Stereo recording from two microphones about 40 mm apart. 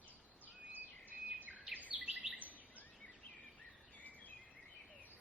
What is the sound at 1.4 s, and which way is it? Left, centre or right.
Bird vocalization, right.